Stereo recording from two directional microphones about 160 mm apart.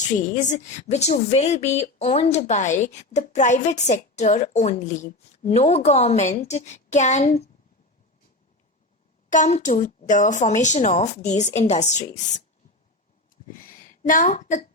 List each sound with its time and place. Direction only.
0.3 s a woman's voice: 50° left (ahead or behind)
9.3 s a woman's voice: 50° left (ahead or behind)
13.3 s a sound: 60° left (ahead or behind)